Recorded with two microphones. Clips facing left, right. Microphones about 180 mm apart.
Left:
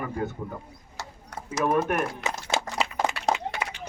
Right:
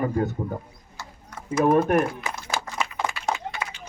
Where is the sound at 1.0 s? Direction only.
80° left.